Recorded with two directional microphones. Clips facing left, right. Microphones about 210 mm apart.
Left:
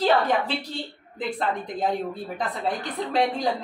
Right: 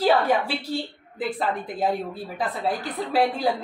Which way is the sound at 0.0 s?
10° right (ahead or behind).